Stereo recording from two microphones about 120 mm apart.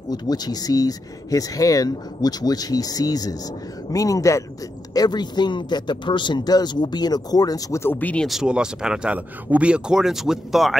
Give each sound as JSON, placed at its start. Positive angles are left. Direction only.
{"t": 0.1, "sound": "speech", "side_deg": 35}
{"t": 8.3, "sound": "speech", "side_deg": -5}